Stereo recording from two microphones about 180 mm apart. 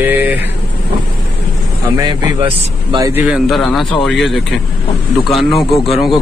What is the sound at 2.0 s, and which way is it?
A man's voice, 25° right (ahead or behind).